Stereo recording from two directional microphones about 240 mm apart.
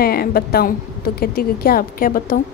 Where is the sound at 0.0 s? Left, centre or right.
Left.